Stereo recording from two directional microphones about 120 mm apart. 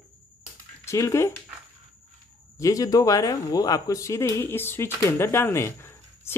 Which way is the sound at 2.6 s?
30° left (ahead or behind).